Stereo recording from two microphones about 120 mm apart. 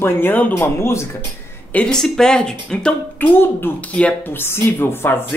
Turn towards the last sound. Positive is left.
turn(degrees=20)  # may be behind; listen again after turning